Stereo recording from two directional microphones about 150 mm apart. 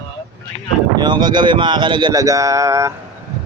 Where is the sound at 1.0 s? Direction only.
30° right (ahead or behind).